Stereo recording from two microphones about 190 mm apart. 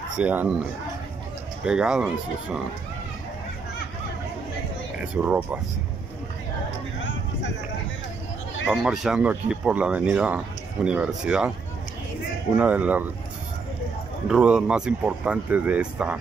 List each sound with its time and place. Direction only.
0.2 s speech: 10° right (ahead or behind)
5.0 s speech: 5° right (ahead or behind)
8.6 s speech: centre (ahead or behind)
12.5 s speech: 5° right (ahead or behind)
14.2 s speech: 5° right (ahead or behind)